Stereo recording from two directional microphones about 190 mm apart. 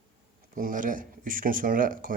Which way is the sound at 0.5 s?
45° right (ahead or behind).